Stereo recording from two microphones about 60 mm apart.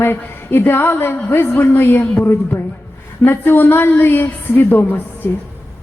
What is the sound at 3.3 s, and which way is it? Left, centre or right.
A woman's voice, left.